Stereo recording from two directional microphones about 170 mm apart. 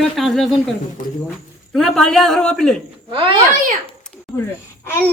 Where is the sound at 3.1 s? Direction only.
30° right (ahead or behind).